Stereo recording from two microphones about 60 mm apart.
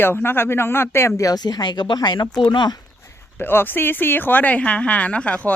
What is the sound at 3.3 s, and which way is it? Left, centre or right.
Speech, left.